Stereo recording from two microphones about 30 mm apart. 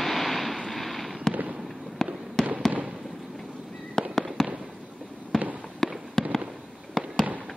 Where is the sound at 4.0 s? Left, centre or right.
Centre.